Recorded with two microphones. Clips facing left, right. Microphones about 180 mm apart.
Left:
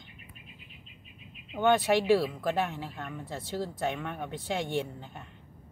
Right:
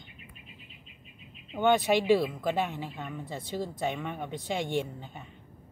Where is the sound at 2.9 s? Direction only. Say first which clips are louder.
Right 1 dB; centre (ahead or behind).